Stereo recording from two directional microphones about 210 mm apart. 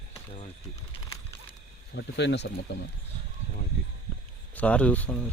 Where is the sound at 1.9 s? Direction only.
55° left (ahead or behind).